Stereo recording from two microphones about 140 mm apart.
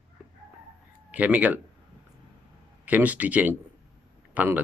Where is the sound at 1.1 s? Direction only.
10° right (ahead or behind).